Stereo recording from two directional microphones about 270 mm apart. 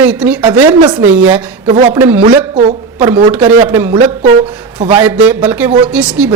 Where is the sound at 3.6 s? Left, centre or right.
Centre.